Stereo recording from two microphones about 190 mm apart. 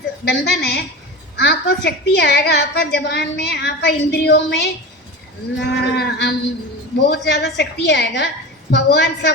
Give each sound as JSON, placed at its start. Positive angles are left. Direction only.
{"t": 0.3, "sound": "a woman's voice", "side_deg": 60}